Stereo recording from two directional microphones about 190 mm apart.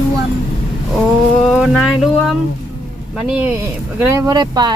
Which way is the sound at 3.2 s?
5° right (ahead or behind).